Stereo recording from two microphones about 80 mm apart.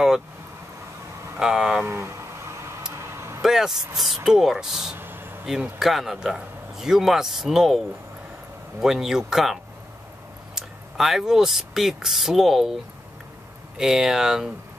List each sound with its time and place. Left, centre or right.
1.4 s speech: centre
1.9 s a sound: right
3.0 s vehicle: right
3.4 s a man's voice: centre
4.9 s a sound: right
5.8 s a man's voice: centre
8.8 s a man's voice: centre
13.7 s a man's voice: centre